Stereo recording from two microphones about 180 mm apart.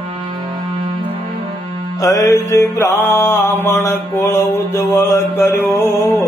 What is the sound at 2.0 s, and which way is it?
Mantra, 20° left (ahead or behind).